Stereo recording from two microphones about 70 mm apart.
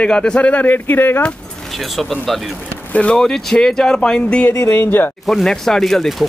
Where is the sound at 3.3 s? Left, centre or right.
Centre.